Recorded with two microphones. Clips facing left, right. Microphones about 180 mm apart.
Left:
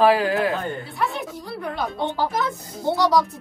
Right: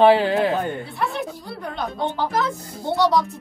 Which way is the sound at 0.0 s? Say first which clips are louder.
Right 3 dB; 25° right (ahead or behind).